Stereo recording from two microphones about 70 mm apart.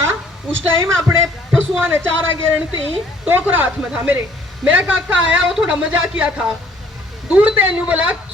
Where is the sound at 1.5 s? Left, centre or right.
Right.